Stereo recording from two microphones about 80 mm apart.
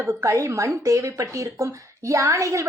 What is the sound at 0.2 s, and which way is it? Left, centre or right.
A woman's voice, right.